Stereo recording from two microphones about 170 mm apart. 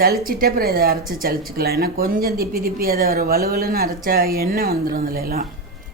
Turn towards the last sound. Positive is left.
turn(degrees=-60)  # may be behind; listen again after turning